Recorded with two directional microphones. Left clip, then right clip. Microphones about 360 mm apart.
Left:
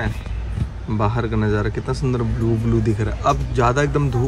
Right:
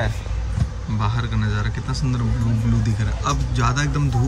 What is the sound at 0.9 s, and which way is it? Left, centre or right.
Speech, centre.